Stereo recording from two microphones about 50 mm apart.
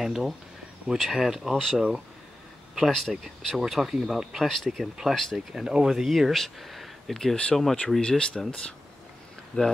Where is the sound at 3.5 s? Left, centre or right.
Centre.